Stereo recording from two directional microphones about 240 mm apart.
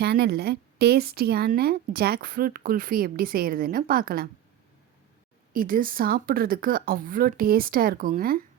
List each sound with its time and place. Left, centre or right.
0.0 s speech: right
5.5 s speech: right